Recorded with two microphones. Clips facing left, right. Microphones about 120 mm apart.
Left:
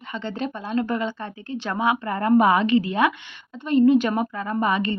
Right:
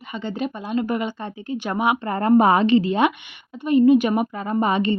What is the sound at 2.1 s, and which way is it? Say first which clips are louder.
A woman's voice: right 2 dB; 35° right (ahead or behind).